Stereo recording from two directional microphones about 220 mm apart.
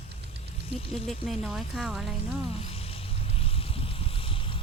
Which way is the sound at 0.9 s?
Centre (ahead or behind).